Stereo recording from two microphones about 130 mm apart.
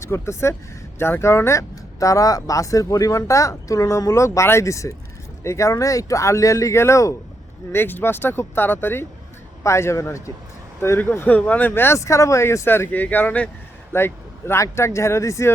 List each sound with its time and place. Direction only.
0.0 s speech: 20° left (ahead or behind)